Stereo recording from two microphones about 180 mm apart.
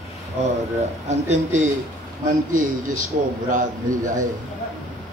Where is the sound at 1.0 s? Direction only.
40° right (ahead or behind).